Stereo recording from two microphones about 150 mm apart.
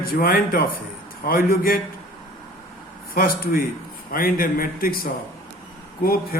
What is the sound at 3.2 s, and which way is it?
Speech, 80° left.